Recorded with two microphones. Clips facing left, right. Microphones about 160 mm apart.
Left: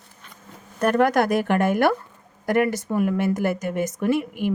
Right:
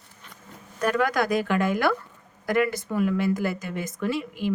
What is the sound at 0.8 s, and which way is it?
Speech, 55° left (ahead or behind).